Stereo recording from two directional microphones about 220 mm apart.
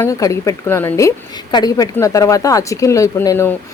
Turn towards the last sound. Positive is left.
turn(degrees=15)  # may be behind; listen again after turning